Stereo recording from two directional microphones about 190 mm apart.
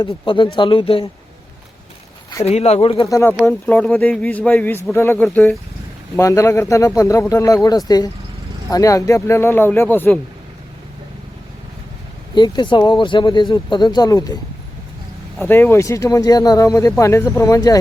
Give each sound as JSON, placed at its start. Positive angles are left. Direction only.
{"t": 0.0, "sound": "speech", "side_deg": 25}
{"t": 2.4, "sound": "speech", "side_deg": 35}
{"t": 3.1, "sound": "speech", "side_deg": 15}
{"t": 12.3, "sound": "speech", "side_deg": 25}
{"t": 15.4, "sound": "speech", "side_deg": 10}